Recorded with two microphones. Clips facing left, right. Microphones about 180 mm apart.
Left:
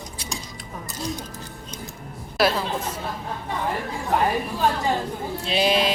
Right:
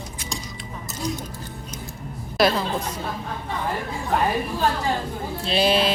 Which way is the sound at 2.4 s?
5° left (ahead or behind).